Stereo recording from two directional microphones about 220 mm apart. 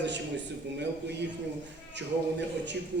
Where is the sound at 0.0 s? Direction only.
55° right (ahead or behind).